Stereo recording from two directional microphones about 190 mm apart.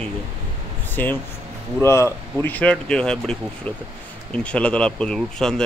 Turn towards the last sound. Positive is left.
turn(degrees=5)  # may be behind; listen again after turning